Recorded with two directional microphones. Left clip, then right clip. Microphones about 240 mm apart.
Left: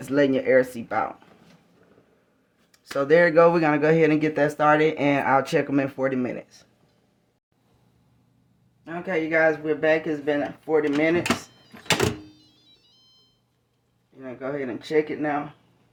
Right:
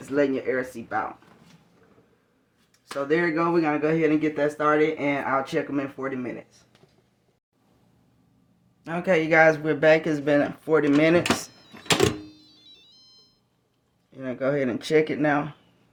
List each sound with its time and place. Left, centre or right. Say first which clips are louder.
0.0 s speech: left 3 dB; left
2.7 s speech: left 6 dB; left
8.8 s speech: right 4 dB; right
14.2 s speech: right 5 dB; right